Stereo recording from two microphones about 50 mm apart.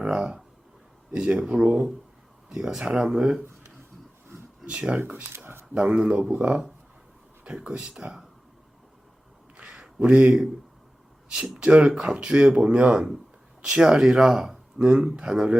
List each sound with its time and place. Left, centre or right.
0.0 s speech: centre
5.0 s speech: right
5.7 s speech: right
7.4 s speech: right
9.6 s a sound: centre
11.5 s speech: right